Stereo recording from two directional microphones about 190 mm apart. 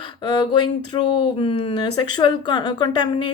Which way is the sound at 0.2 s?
25° left (ahead or behind).